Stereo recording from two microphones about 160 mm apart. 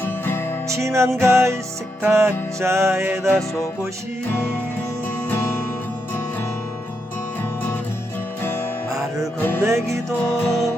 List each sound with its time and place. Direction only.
0.0 s music: 15° left (ahead or behind)
0.7 s music: 15° right (ahead or behind)
9.6 s music: 20° right (ahead or behind)
10.4 s music: centre (ahead or behind)